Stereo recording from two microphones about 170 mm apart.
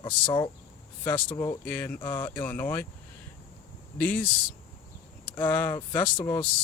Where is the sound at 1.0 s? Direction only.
10° left (ahead or behind).